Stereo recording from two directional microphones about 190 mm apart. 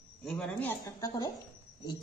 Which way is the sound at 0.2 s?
5° left (ahead or behind).